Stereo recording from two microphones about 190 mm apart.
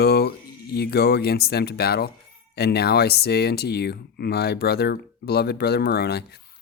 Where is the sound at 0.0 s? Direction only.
55° left (ahead or behind).